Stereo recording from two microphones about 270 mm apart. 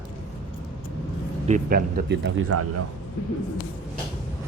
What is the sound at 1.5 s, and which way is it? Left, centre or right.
Speech, right.